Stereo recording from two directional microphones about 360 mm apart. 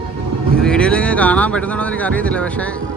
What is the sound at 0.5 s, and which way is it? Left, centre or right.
A man's voice, centre.